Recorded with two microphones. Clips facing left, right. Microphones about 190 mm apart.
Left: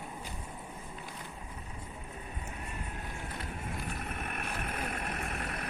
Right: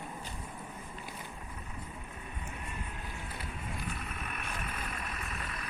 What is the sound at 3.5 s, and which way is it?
Vehicle, 55° left (ahead or behind).